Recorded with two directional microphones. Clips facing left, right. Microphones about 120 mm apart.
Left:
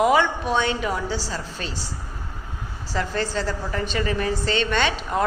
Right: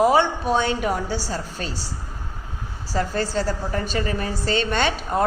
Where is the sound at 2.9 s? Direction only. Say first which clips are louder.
Right 2 dB; 40° right (ahead or behind).